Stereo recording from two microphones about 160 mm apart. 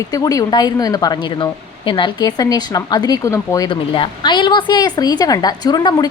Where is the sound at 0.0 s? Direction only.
20° left (ahead or behind).